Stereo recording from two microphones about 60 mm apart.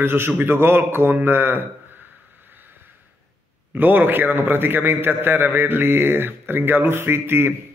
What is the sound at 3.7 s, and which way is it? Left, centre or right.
A man's voice, right.